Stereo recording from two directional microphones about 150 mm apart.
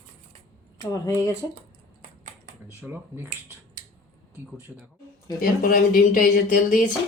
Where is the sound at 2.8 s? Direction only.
15° right (ahead or behind).